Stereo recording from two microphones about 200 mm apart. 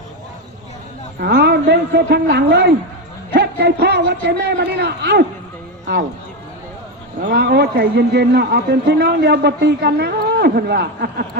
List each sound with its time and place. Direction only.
1.2 s a man's voice: 55° right (ahead or behind)
7.2 s a man's voice: 45° right (ahead or behind)